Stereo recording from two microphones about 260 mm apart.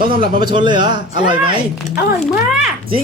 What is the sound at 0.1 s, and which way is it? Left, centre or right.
A woman's voice, centre.